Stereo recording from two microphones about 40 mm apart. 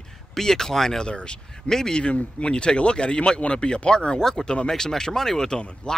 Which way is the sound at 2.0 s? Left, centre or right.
Left.